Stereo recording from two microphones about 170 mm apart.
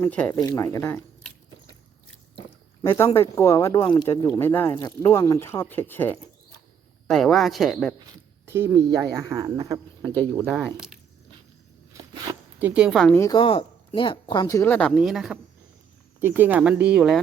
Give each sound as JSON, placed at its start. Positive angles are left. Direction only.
{"t": 0.0, "sound": "speech", "side_deg": 10}
{"t": 3.0, "sound": "speech", "side_deg": 15}
{"t": 7.1, "sound": "speech", "side_deg": 0}
{"t": 8.4, "sound": "speech", "side_deg": -15}
{"t": 10.3, "sound": "speech", "side_deg": -5}
{"t": 12.3, "sound": "speech", "side_deg": -10}
{"t": 13.1, "sound": "speech", "side_deg": 20}
{"t": 13.4, "sound": "speech", "side_deg": 30}